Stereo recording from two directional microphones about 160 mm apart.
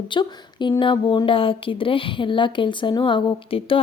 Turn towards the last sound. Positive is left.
turn(degrees=30)  # may be behind; listen again after turning